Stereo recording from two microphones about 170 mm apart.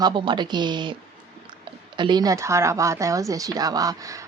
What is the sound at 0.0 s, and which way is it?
Speech, 25° right (ahead or behind).